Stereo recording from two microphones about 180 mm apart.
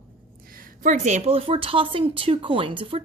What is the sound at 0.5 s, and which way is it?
A woman's voice, 50° right (ahead or behind).